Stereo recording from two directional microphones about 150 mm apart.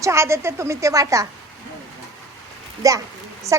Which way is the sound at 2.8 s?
25° right (ahead or behind).